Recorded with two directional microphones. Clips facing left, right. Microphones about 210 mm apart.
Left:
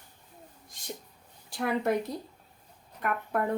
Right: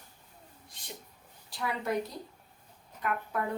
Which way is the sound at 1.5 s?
55° left (ahead or behind).